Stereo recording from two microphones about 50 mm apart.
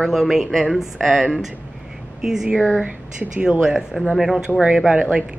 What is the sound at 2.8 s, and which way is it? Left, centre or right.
Speech, right.